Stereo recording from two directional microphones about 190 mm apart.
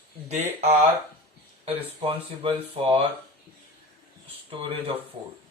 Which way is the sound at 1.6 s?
30° right (ahead or behind).